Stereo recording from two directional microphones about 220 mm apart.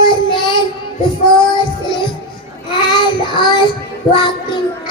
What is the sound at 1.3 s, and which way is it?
Music, 20° left (ahead or behind).